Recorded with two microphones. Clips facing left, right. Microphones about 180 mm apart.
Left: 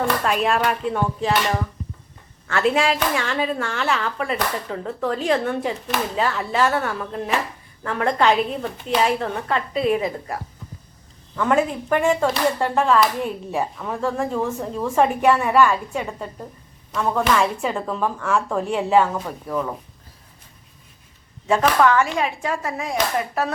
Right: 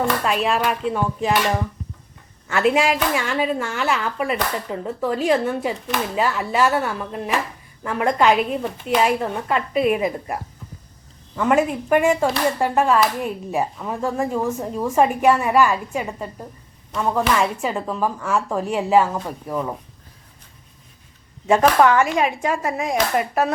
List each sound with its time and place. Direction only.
0.3 s speech: centre (ahead or behind)
2.5 s speech: 10° right (ahead or behind)
11.3 s speech: 5° right (ahead or behind)
19.5 s speech: 15° right (ahead or behind)
21.4 s a woman's voice: 15° right (ahead or behind)